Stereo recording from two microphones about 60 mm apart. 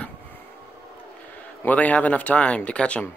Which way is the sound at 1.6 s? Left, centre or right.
Left.